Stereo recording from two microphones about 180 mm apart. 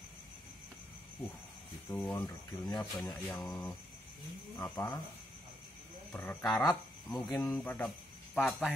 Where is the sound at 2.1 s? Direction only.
20° left (ahead or behind); by 3.7 s 5° left (ahead or behind).